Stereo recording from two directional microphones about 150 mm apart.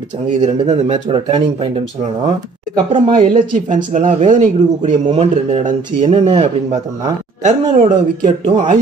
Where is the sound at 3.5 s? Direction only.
55° right (ahead or behind); by 6.8 s 40° right (ahead or behind).